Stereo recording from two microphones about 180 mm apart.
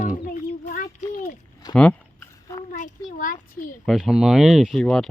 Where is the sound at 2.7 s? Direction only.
45° left (ahead or behind).